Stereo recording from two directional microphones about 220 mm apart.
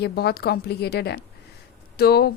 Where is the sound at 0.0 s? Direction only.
45° left (ahead or behind).